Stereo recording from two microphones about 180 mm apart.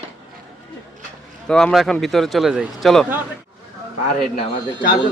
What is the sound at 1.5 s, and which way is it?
Speech, 5° left (ahead or behind).